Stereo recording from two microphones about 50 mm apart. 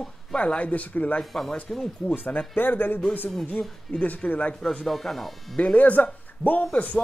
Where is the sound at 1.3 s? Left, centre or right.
Centre.